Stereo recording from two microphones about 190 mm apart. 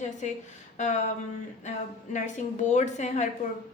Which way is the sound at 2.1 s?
40° left (ahead or behind).